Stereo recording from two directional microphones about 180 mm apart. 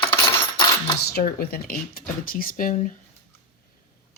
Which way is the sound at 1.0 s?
55° left (ahead or behind).